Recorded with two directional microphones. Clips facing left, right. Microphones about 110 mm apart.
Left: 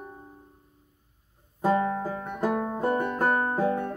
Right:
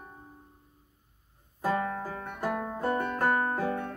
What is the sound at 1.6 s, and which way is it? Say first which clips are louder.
Banjo: left 5 dB; 25° left (ahead or behind).